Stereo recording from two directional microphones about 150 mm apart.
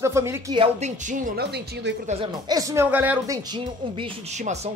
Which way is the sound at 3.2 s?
25° right (ahead or behind).